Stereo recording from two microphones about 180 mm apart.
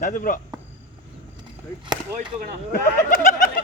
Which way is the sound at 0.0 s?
45° left (ahead or behind).